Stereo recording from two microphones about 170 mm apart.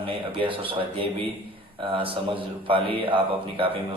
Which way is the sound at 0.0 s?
30° right (ahead or behind).